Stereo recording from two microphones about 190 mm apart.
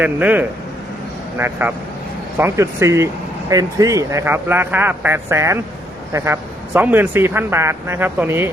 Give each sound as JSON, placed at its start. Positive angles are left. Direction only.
{"t": 0.0, "sound": "speech", "side_deg": -10}